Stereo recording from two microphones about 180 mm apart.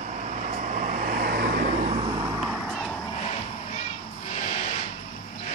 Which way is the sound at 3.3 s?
35° left (ahead or behind).